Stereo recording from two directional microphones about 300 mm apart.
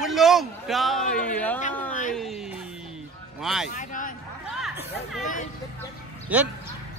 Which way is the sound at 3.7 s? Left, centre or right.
Left.